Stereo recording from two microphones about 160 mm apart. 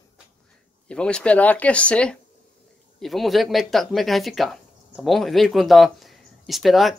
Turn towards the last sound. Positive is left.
turn(degrees=0)  # may be behind; listen again after turning